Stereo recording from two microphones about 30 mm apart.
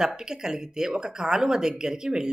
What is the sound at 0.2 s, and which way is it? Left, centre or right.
Speech, right.